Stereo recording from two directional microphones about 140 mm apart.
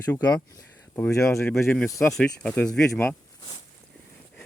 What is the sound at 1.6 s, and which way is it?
Speech, 10° left (ahead or behind).